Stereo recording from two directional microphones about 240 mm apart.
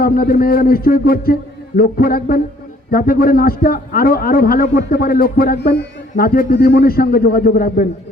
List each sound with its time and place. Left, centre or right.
0.0 s a man's voice: left